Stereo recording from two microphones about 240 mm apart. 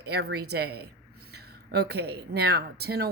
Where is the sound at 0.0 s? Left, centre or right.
Right.